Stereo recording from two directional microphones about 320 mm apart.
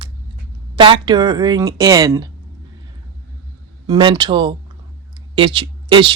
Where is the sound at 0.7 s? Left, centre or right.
Centre.